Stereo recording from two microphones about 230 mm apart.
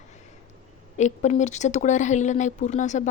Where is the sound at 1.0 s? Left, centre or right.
Left.